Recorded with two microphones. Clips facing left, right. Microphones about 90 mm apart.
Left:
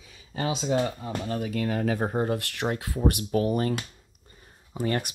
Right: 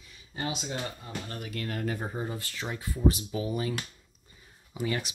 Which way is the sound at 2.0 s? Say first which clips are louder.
Left 8 dB; 55° left (ahead or behind).